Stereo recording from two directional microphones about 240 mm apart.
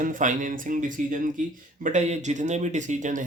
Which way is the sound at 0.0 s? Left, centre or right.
Right.